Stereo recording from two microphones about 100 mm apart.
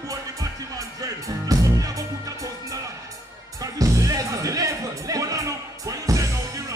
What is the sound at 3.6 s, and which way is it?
Music, 35° right (ahead or behind).